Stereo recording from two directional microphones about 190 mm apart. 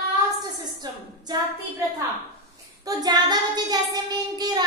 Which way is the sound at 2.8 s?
20° right (ahead or behind).